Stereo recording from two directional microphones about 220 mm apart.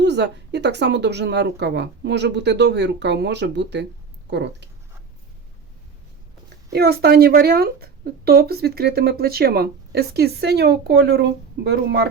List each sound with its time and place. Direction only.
0.0 s speech: 50° right (ahead or behind)
6.7 s speech: 45° right (ahead or behind)